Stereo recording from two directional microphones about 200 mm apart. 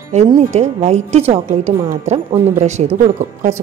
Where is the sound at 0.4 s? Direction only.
35° right (ahead or behind).